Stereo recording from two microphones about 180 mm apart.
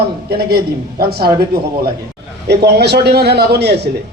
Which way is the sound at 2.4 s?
65° right (ahead or behind).